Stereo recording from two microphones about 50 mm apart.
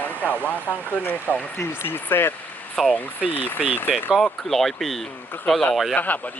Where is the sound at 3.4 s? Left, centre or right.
Left.